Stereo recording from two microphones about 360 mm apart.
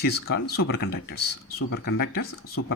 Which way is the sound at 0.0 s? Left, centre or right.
Left.